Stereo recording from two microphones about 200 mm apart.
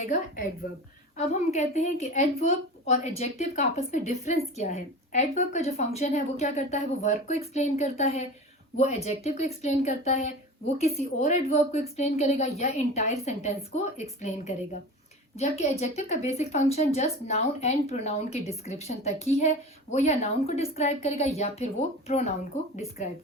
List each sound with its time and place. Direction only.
0.0 s a woman's voice: 45° left (ahead or behind)